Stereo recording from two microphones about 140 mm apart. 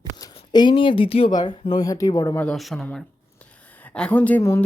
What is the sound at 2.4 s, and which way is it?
Speech, centre (ahead or behind).